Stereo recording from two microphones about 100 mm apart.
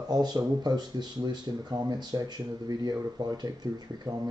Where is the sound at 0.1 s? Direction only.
40° right (ahead or behind).